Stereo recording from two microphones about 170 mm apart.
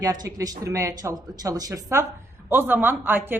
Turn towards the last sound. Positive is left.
turn(degrees=-10)  # may be behind; listen again after turning